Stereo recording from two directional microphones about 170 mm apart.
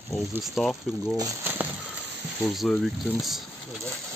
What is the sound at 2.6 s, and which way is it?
Speech, centre (ahead or behind).